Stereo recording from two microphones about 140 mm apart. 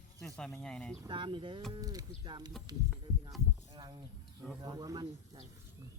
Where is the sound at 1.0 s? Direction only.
35° right (ahead or behind).